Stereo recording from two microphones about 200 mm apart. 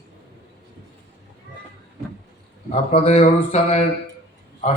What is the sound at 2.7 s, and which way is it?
A man's voice, 30° left (ahead or behind).